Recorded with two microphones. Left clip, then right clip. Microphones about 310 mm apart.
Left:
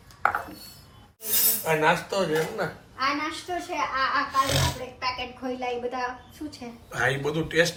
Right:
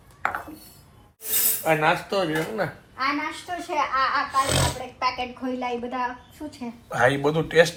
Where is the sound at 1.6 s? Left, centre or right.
Right.